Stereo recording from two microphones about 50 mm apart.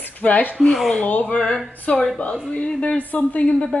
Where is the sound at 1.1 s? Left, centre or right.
Left.